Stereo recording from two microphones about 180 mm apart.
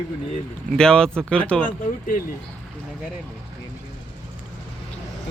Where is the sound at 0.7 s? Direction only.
5° left (ahead or behind).